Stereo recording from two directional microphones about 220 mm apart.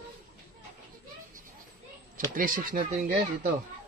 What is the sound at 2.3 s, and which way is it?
Speech, 40° right (ahead or behind).